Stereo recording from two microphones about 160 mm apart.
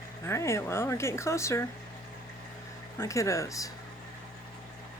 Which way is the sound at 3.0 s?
20° left (ahead or behind).